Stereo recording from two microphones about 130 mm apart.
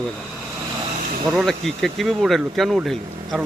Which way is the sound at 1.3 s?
Centre (ahead or behind).